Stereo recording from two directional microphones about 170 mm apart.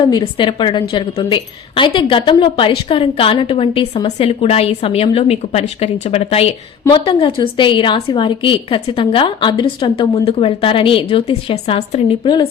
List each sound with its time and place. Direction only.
0.0 s a woman's voice: 25° left (ahead or behind)